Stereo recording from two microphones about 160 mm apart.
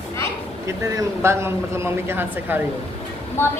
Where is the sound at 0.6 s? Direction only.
15° right (ahead or behind).